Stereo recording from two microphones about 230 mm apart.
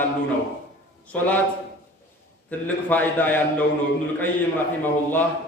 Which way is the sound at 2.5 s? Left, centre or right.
Centre.